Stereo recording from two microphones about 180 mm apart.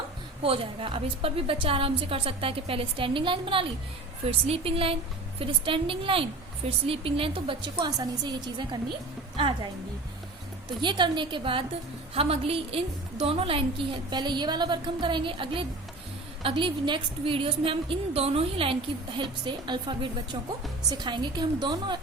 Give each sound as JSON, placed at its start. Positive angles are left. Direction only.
{"t": 0.4, "sound": "a woman's voice", "side_deg": -30}
{"t": 10.8, "sound": "a woman's voice", "side_deg": -25}